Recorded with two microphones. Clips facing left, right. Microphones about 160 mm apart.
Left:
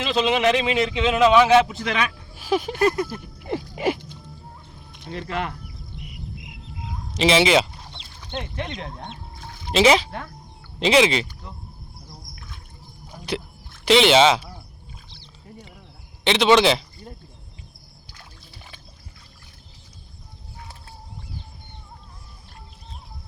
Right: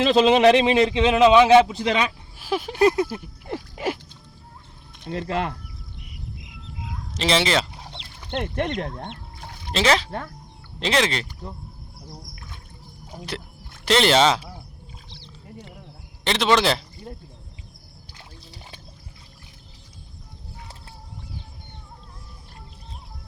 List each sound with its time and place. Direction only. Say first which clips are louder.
0.0 s a man's voice: right 5 dB; 35° right (ahead or behind)
2.4 s a man's voice: left 3 dB; centre (ahead or behind)
2.8 s a man's voice: right 4 dB; 25° right (ahead or behind)
3.1 s a sound: left 2 dB; 5° right (ahead or behind)
5.0 s speech: right 3 dB; 30° right (ahead or behind)
7.2 s a man's voice: left 4 dB; 5° left (ahead or behind)
8.4 s speech: right 6 dB; 70° right (ahead or behind)
9.7 s a man's voice: left 4 dB; 10° left (ahead or behind)
13.3 s a man's voice: left 9 dB; 5° left (ahead or behind)
16.2 s a man's voice: left 3 dB; centre (ahead or behind)